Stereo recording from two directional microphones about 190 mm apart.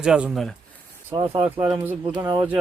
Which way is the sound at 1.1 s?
25° right (ahead or behind).